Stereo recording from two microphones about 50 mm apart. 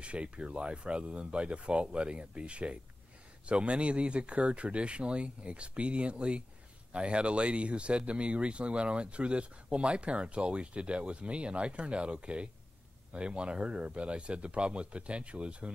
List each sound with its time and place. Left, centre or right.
0.0 s speech: right